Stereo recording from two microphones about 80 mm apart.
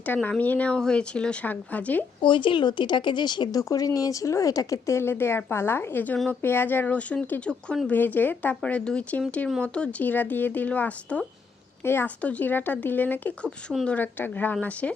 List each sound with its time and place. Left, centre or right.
0.0 s speech: left
2.2 s speech: left
3.6 s speech: left
4.9 s speech: left
11.8 s a woman's voice: left
12.0 s speech: centre